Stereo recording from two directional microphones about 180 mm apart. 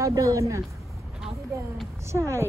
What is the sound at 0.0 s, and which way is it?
Speech, 20° right (ahead or behind).